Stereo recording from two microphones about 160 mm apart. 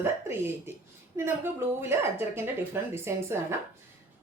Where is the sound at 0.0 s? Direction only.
15° right (ahead or behind).